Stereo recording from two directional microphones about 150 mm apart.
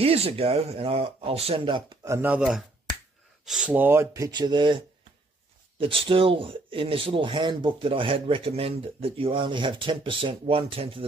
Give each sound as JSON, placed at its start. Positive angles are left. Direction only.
{"t": 0.0, "sound": "speech", "side_deg": -40}
{"t": 2.0, "sound": "speech", "side_deg": -15}